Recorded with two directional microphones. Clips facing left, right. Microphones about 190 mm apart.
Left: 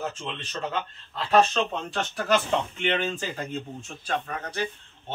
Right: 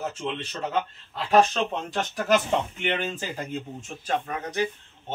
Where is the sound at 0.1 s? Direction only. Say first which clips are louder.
Right 3 dB; 10° right (ahead or behind).